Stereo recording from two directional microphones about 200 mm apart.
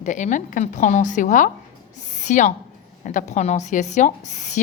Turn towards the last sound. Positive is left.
turn(degrees=35)  # may be behind; listen again after turning